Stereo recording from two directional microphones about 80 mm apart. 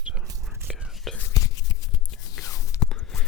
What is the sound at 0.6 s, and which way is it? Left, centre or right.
Whispering, centre.